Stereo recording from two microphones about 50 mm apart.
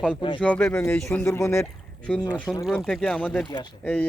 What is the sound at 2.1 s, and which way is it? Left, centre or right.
Speech, centre.